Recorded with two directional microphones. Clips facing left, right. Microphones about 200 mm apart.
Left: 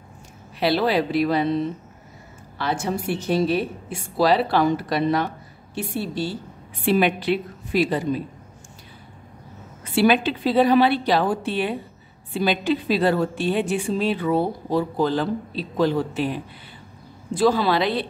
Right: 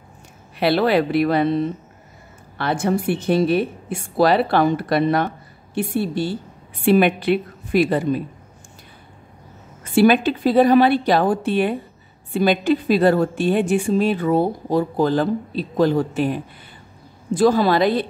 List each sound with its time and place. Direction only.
0.6 s a woman's voice: 60° right (ahead or behind)
9.9 s a woman's voice: 45° right (ahead or behind)